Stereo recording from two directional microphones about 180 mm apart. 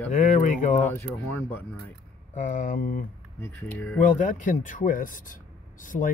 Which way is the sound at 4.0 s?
45° left (ahead or behind).